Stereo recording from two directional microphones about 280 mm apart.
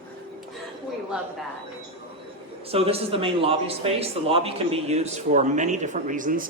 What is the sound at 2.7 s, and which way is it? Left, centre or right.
A man's voice, right.